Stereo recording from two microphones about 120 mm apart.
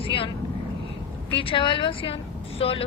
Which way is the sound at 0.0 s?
45° left (ahead or behind).